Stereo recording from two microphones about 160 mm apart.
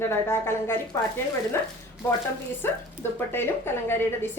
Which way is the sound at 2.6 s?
15° left (ahead or behind).